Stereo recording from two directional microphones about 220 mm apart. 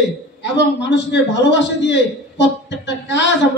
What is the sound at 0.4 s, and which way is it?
A man's voice, 50° left (ahead or behind).